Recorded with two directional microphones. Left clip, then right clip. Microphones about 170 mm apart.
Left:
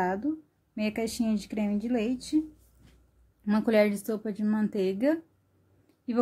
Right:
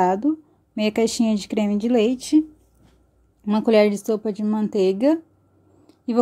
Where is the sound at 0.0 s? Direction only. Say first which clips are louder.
Right 10 dB; 35° right (ahead or behind).